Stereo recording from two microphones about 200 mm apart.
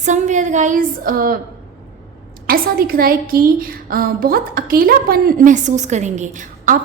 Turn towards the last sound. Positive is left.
turn(degrees=-40)  # may be behind; listen again after turning